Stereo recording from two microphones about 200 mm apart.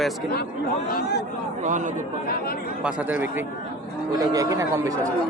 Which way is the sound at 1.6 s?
40° right (ahead or behind).